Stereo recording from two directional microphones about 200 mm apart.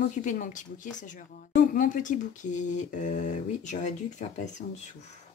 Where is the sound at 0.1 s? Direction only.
40° left (ahead or behind).